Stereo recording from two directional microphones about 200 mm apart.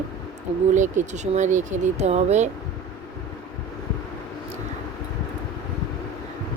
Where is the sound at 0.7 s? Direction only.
35° right (ahead or behind).